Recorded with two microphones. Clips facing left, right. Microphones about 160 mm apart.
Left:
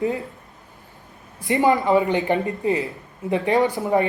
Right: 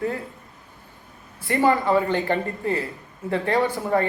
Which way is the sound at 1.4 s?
20° left (ahead or behind).